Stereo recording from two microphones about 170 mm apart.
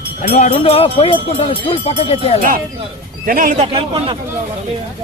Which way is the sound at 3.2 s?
55° right (ahead or behind).